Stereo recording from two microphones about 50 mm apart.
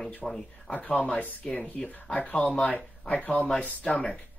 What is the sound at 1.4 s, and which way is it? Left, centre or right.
Speech, centre.